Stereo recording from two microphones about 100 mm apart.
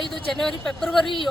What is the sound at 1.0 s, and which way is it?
Speech, 55° left (ahead or behind).